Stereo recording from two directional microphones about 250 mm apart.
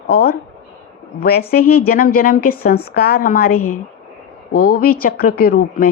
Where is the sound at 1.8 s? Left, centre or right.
Left.